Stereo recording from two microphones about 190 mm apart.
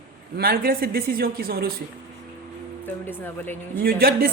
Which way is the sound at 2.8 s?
10° left (ahead or behind).